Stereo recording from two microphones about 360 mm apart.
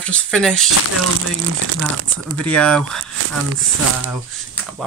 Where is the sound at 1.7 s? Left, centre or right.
Right.